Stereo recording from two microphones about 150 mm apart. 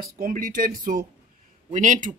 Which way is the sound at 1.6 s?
55° right (ahead or behind).